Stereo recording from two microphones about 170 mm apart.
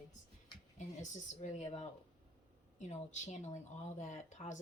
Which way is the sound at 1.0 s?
45° left (ahead or behind).